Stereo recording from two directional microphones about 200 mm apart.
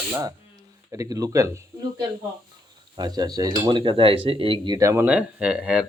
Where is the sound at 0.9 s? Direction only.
15° right (ahead or behind).